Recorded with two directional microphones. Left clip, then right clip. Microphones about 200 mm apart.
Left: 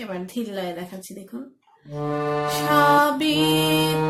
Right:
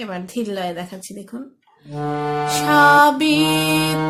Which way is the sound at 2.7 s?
35° right (ahead or behind).